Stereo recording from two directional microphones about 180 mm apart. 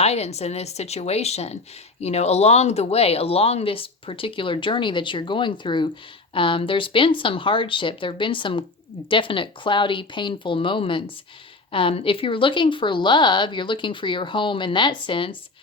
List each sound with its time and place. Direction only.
0.0 s a woman's voice: 35° left (ahead or behind)